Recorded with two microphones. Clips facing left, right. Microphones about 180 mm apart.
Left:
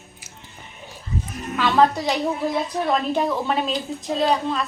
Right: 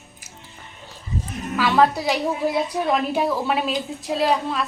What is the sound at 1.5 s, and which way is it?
A woman's voice, 5° right (ahead or behind).